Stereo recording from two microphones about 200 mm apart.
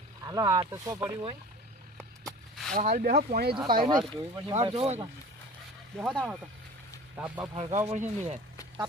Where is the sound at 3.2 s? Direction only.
45° right (ahead or behind).